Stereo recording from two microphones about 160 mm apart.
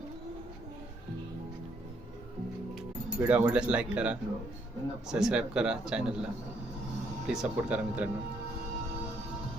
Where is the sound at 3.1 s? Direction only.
10° right (ahead or behind).